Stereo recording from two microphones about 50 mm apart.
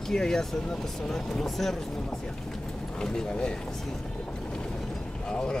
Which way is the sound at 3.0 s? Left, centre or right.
Centre.